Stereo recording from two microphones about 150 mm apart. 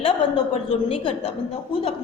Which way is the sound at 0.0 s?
40° left (ahead or behind).